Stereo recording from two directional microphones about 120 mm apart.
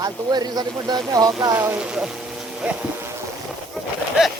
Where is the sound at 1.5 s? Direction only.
15° right (ahead or behind).